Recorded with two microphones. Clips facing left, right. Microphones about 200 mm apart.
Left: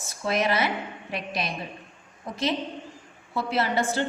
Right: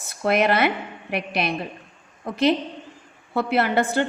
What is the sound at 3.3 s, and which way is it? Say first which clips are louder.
Speech: right 5 dB; 60° right (ahead or behind).